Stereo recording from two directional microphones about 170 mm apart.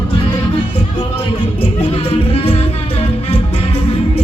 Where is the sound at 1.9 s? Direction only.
35° left (ahead or behind).